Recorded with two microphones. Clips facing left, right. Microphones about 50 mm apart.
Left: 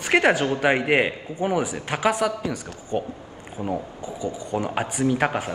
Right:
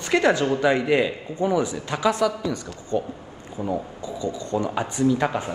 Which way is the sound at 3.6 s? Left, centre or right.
Centre.